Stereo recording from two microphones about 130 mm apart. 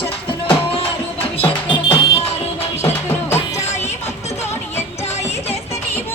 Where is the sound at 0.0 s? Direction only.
45° left (ahead or behind).